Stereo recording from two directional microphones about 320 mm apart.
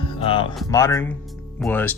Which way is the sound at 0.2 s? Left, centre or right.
Centre.